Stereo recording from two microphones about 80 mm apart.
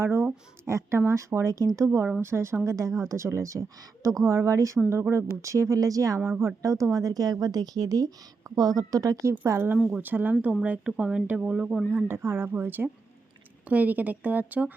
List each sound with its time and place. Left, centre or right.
0.0 s a sound: right
0.6 s a woman's voice: right
9.3 s speech: right
9.7 s speech: centre
10.0 s speech: right
10.6 s speech: centre
11.9 s speech: right